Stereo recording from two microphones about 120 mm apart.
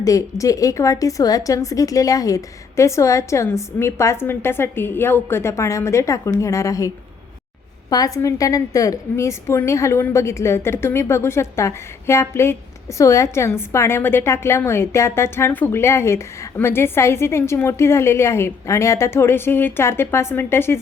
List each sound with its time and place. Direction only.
0.0 s a woman's voice: 30° left (ahead or behind)